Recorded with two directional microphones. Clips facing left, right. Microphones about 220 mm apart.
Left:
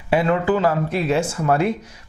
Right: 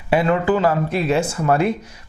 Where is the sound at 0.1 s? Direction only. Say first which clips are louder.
Right 1 dB; 15° right (ahead or behind).